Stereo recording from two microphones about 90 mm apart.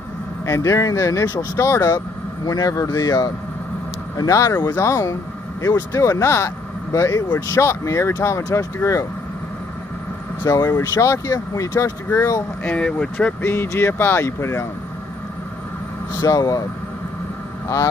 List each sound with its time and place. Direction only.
0.5 s speech: 35° left (ahead or behind)
10.5 s speech: 45° left (ahead or behind)
12.6 s speech: 10° left (ahead or behind)
13.4 s speech: 25° left (ahead or behind)
16.2 s speech: 45° left (ahead or behind)